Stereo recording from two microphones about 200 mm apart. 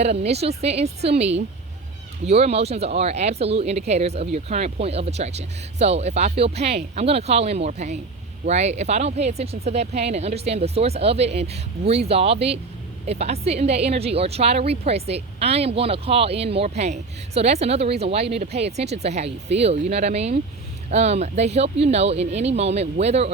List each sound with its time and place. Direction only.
0.0 s a woman's voice: 30° right (ahead or behind)